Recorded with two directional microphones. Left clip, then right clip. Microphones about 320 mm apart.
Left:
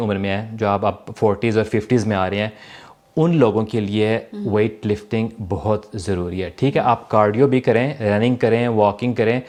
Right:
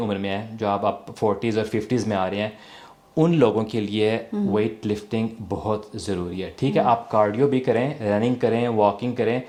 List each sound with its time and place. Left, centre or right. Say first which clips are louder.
0.0 s speech: left 4 dB; left